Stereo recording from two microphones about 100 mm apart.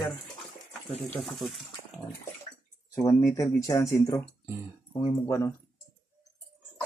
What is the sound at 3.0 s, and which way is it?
Speech, 30° left (ahead or behind).